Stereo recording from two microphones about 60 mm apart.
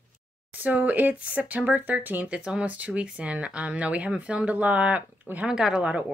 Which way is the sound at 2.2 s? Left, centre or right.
Centre.